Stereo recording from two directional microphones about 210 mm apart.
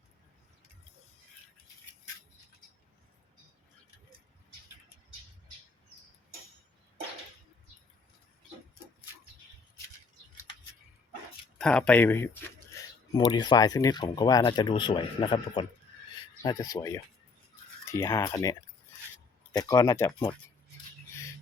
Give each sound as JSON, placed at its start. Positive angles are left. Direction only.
{"t": 11.5, "sound": "speech", "side_deg": 5}
{"t": 19.5, "sound": "speech", "side_deg": 20}